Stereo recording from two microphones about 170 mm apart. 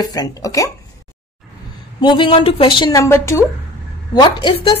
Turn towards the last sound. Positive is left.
turn(degrees=30)  # may be behind; listen again after turning